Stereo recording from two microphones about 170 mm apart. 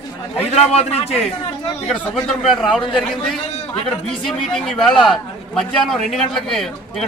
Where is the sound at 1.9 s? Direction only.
Centre (ahead or behind).